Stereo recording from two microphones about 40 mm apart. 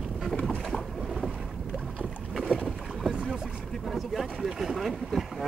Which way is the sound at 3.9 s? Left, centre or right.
Centre.